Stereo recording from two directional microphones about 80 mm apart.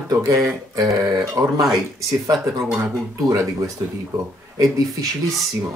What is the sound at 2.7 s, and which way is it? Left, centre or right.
Speech, right.